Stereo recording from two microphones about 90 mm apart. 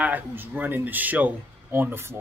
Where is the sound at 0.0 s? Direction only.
20° right (ahead or behind).